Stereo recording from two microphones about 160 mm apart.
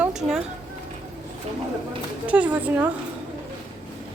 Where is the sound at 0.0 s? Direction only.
5° right (ahead or behind).